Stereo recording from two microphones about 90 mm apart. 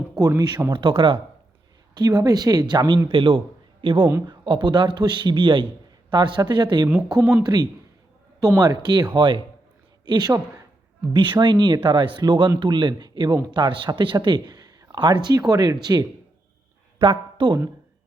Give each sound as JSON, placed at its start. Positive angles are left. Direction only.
{"t": 0.2, "sound": "speech", "side_deg": -45}
{"t": 0.7, "sound": "speech", "side_deg": -70}
{"t": 2.0, "sound": "speech", "side_deg": -50}
{"t": 3.1, "sound": "a man's voice", "side_deg": -75}
{"t": 6.1, "sound": "speech", "side_deg": -55}
{"t": 9.1, "sound": "speech", "side_deg": -65}
{"t": 10.1, "sound": "speech", "side_deg": -50}
{"t": 11.1, "sound": "speech", "side_deg": -65}
{"t": 14.9, "sound": "speech", "side_deg": -65}
{"t": 17.0, "sound": "speech", "side_deg": -70}